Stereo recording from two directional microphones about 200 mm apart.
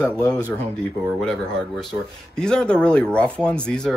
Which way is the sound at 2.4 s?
5° left (ahead or behind).